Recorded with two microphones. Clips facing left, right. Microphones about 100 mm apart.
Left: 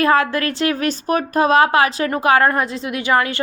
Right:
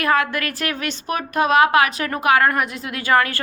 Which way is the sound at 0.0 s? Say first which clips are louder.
Left 4 dB; 30° left (ahead or behind).